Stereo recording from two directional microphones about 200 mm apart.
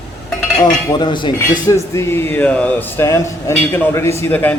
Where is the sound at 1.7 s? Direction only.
15° left (ahead or behind).